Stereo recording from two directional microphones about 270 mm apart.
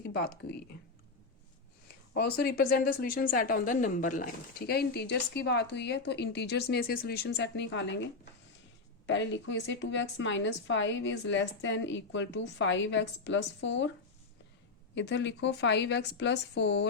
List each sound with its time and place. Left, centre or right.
0.1 s speech: left
2.3 s a woman's voice: left
14.9 s a woman's voice: left